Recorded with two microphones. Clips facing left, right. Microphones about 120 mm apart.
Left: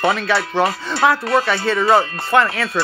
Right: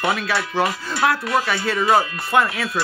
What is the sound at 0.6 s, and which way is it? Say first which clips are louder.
Speech: left 3 dB; 35° left (ahead or behind).